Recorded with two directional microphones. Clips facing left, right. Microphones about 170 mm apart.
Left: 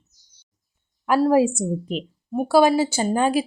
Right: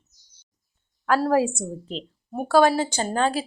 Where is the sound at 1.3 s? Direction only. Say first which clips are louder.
Left 4 dB; 10° left (ahead or behind).